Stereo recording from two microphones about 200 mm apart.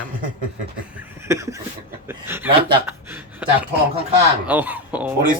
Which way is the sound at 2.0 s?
10° right (ahead or behind).